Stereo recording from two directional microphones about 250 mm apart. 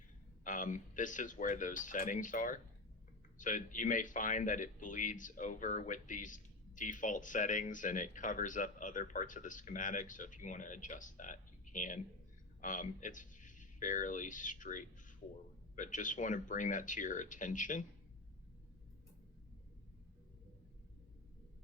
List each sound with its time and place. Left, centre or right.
0.4 s speech: left